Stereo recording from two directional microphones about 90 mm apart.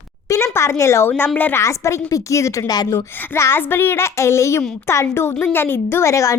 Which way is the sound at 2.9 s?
30° left (ahead or behind).